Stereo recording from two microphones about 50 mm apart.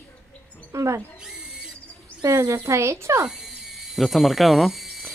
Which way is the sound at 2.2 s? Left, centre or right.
Right.